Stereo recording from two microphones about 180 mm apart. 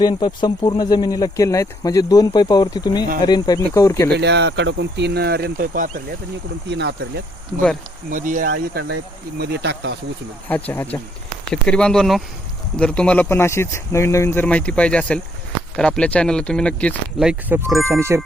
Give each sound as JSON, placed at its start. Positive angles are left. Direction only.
{"t": 0.0, "sound": "speech", "side_deg": 25}
{"t": 4.2, "sound": "speech", "side_deg": -70}
{"t": 6.7, "sound": "speech", "side_deg": -70}
{"t": 8.1, "sound": "speech", "side_deg": -50}
{"t": 10.5, "sound": "speech", "side_deg": 10}
{"t": 17.7, "sound": "speech", "side_deg": -15}